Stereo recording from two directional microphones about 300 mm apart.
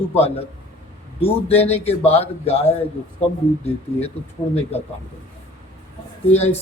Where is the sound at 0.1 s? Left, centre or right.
Left.